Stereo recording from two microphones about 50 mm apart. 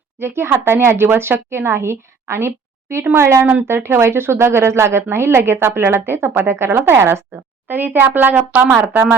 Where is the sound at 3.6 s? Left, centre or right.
Right.